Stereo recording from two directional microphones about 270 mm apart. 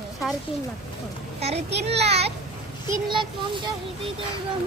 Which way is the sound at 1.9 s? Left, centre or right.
Right.